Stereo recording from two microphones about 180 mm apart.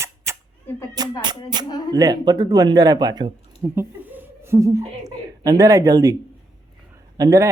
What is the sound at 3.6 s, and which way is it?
A woman's voice, 10° right (ahead or behind).